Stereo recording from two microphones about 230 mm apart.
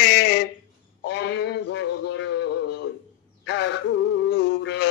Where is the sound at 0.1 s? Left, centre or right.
Left.